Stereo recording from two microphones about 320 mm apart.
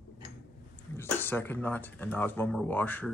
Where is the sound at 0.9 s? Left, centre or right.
Centre.